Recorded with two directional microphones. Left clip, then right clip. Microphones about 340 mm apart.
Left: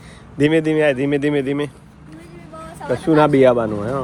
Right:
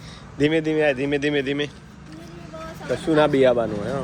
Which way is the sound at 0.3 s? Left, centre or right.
Left.